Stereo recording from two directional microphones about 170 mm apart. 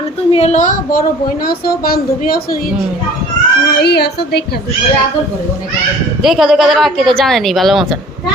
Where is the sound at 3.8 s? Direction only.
75° left (ahead or behind).